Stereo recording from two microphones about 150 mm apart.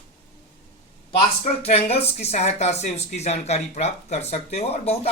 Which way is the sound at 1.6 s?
40° left (ahead or behind).